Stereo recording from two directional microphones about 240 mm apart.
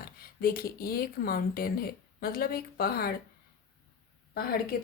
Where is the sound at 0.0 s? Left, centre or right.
Left.